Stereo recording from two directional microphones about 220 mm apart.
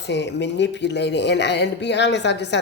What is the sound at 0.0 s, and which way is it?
Speech, 50° left (ahead or behind).